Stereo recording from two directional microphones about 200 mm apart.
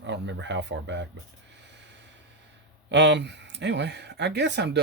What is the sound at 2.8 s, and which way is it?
Speech, 60° right (ahead or behind).